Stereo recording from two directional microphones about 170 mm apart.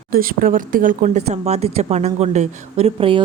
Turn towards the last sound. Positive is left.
turn(degrees=-30)  # may be behind; listen again after turning